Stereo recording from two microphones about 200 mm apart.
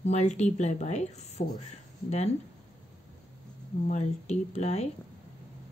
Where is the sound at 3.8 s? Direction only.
35° left (ahead or behind).